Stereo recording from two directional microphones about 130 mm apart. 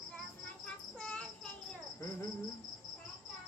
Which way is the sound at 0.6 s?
5° left (ahead or behind).